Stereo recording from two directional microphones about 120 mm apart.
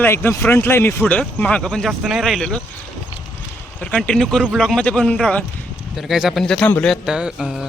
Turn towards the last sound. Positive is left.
turn(degrees=-5)  # may be behind; listen again after turning